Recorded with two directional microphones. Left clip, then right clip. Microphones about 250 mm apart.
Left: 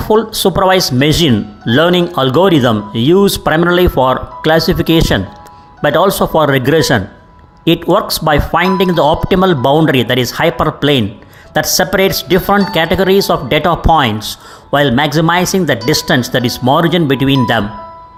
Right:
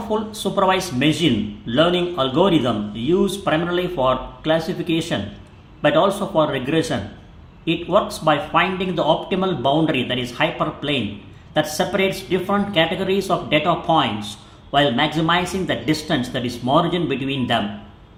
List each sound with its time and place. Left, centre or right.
0.1 s speech: left